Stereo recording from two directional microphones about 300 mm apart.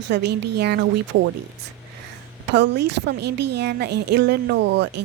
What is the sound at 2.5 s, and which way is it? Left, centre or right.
A woman's voice, right.